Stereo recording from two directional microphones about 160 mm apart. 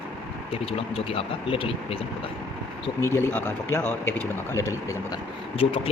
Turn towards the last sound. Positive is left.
turn(degrees=35)  # may be behind; listen again after turning